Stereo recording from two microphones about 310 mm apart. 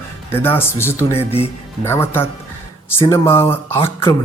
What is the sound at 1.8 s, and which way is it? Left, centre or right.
A man's voice, centre.